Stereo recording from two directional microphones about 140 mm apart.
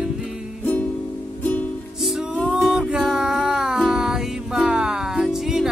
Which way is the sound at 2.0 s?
Centre (ahead or behind).